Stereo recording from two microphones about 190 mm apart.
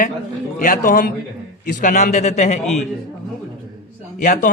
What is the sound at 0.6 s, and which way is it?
A man's voice, 45° left (ahead or behind).